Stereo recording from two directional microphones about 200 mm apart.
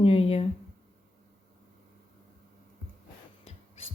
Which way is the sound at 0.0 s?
30° left (ahead or behind).